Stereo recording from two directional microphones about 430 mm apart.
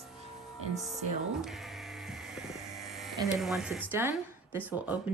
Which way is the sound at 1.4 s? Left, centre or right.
Centre.